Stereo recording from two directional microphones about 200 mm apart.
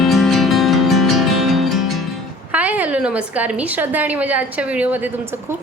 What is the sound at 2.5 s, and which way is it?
A woman's voice, 10° right (ahead or behind).